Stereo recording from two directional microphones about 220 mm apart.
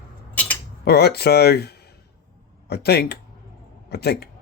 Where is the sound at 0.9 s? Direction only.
45° left (ahead or behind).